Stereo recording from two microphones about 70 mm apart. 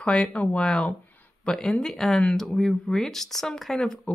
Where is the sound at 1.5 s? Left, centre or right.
Centre.